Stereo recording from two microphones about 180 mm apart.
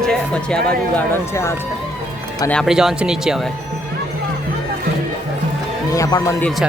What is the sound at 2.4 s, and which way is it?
Speech, centre (ahead or behind).